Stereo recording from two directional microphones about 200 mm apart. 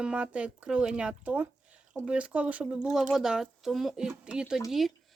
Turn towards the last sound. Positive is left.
turn(degrees=-5)  # may be behind; listen again after turning